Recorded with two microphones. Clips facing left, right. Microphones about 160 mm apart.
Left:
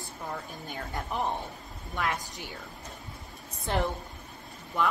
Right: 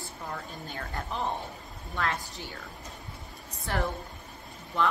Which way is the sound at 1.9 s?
15° left (ahead or behind).